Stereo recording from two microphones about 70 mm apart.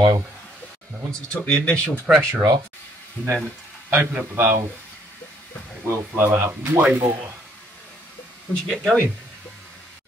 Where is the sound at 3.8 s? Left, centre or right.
Right.